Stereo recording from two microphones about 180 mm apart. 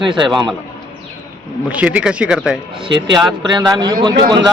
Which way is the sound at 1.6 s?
5° right (ahead or behind).